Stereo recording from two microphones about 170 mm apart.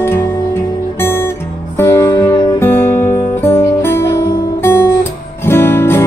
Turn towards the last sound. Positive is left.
turn(degrees=15)  # may be behind; listen again after turning